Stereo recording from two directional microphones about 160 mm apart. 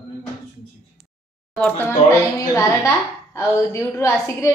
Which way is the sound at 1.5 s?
10° left (ahead or behind).